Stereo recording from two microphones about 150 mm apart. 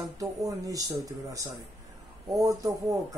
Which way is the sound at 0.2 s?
20° right (ahead or behind).